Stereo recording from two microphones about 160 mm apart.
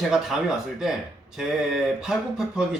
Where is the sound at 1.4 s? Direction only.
Centre (ahead or behind).